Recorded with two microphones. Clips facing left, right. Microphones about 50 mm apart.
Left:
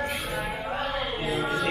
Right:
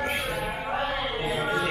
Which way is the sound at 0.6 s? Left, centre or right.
Right.